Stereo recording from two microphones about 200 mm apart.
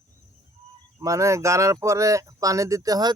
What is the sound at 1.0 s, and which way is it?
Speech, 15° right (ahead or behind).